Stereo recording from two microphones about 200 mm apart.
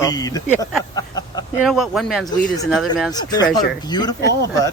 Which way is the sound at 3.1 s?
20° left (ahead or behind).